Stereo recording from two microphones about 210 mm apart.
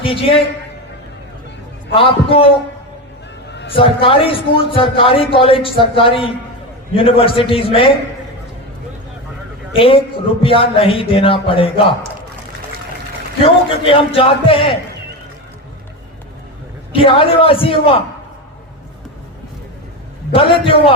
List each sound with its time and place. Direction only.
0.0 s a man's voice: 25° left (ahead or behind)
1.9 s a man's voice: 25° left (ahead or behind)
3.7 s a man's voice: 25° left (ahead or behind)
9.7 s a man's voice: 25° left (ahead or behind)
13.4 s a man's voice: 25° left (ahead or behind)
16.9 s a man's voice: 25° left (ahead or behind)
20.3 s a man's voice: 25° left (ahead or behind)